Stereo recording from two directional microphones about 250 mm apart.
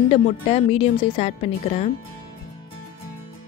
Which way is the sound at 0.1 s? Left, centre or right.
Left.